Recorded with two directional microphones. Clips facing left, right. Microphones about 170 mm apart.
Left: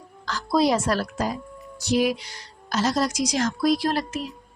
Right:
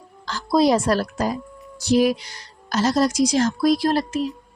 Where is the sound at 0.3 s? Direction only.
35° right (ahead or behind).